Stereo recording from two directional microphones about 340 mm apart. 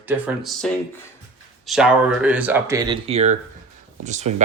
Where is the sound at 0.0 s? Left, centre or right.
Centre.